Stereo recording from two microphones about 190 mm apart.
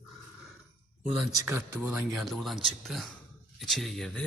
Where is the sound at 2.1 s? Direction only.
Centre (ahead or behind).